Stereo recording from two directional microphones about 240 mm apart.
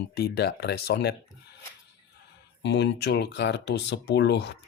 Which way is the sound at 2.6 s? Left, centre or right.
Left.